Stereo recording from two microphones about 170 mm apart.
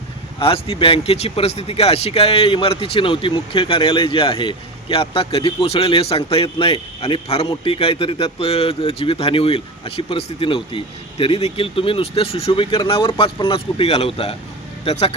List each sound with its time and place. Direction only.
0.3 s speech: 35° left (ahead or behind)